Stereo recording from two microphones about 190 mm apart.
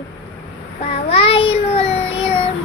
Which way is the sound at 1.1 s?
30° left (ahead or behind).